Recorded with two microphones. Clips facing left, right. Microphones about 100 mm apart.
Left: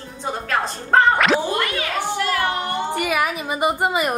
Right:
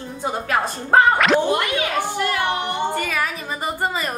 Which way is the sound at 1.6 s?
20° right (ahead or behind).